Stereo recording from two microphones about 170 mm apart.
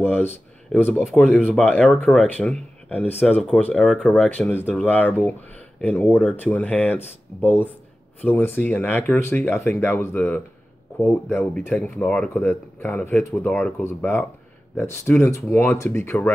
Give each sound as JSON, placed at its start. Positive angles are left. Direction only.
{"t": 0.7, "sound": "speech", "side_deg": 0}
{"t": 2.0, "sound": "speech", "side_deg": 5}